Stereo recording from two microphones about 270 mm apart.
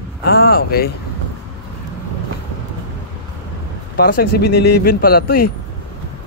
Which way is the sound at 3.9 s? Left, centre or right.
Left.